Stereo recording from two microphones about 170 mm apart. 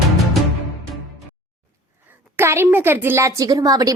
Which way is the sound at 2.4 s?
15° right (ahead or behind).